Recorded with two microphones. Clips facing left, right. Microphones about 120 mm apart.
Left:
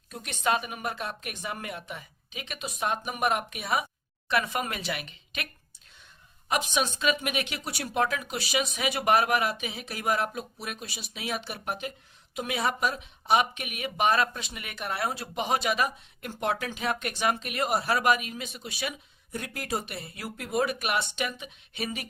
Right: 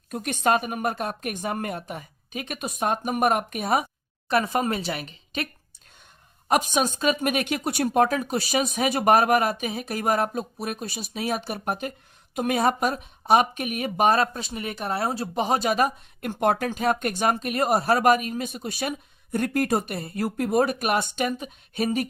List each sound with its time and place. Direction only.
0.1 s speech: 50° right (ahead or behind)
6.5 s speech: 45° right (ahead or behind)